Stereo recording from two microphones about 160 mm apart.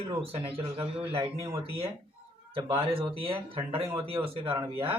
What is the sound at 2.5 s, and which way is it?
Speech, 30° right (ahead or behind).